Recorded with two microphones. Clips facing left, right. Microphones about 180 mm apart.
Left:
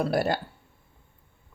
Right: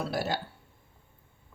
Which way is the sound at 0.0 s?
55° left (ahead or behind).